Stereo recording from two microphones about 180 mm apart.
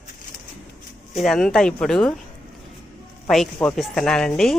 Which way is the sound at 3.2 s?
5° left (ahead or behind).